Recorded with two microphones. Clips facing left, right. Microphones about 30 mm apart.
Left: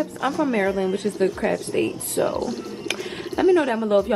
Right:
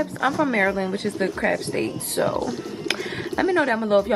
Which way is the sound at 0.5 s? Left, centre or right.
Right.